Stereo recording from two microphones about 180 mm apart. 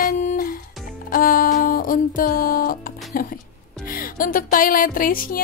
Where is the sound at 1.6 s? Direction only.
50° left (ahead or behind).